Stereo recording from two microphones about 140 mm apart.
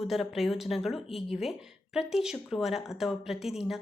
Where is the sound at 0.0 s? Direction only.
Centre (ahead or behind).